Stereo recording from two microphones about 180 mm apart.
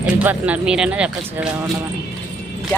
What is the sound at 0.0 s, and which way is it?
Speech, 10° right (ahead or behind).